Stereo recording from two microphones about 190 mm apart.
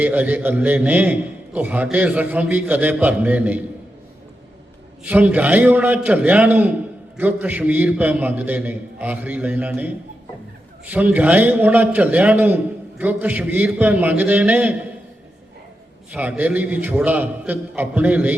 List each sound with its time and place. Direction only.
0.0 s a man's voice: 10° right (ahead or behind)
5.0 s a man's voice: 10° right (ahead or behind)
16.1 s a man's voice: 5° right (ahead or behind)